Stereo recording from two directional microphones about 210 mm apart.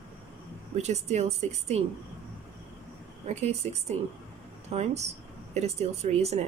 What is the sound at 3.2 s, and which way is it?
Speech, 30° right (ahead or behind).